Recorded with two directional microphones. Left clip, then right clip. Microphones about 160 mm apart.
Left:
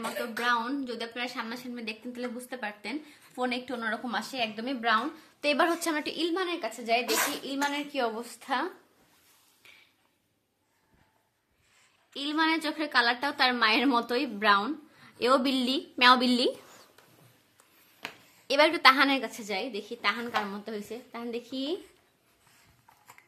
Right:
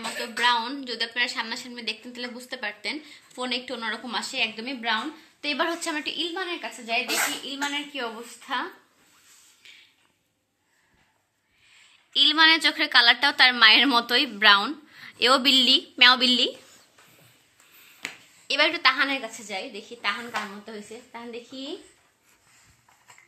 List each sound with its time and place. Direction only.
0.4 s a woman's voice: 55° left (ahead or behind); by 8.6 s 90° left
12.1 s a woman's voice: 10° left (ahead or behind); by 16.5 s 30° left (ahead or behind)
18.5 s a woman's voice: 50° left (ahead or behind); by 21.7 s 90° left